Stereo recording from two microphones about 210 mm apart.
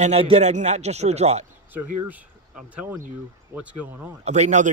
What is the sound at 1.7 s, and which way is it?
Speech, 10° right (ahead or behind).